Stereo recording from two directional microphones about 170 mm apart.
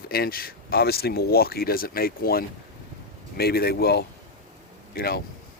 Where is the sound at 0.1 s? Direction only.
60° left (ahead or behind).